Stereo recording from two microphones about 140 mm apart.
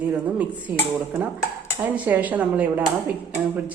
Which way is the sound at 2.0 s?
10° right (ahead or behind).